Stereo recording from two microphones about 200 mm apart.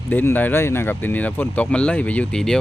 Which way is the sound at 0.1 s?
10° left (ahead or behind).